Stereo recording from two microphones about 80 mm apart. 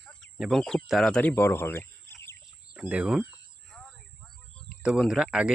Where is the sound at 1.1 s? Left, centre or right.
Centre; by 2.4 s left.